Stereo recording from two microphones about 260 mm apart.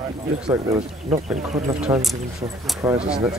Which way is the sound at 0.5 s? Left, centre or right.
Centre.